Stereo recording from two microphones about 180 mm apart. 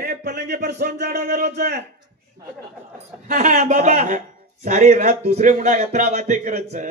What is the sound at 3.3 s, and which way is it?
A man's voice, 40° right (ahead or behind).